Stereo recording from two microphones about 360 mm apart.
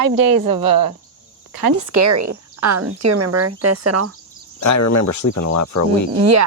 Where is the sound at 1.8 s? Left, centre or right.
Right.